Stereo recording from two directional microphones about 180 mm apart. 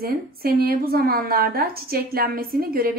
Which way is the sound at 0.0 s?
55° right (ahead or behind).